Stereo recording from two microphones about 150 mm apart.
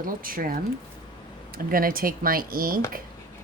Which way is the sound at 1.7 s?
75° right (ahead or behind).